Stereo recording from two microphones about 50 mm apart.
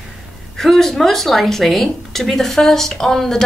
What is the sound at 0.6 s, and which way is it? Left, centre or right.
A woman's voice, centre.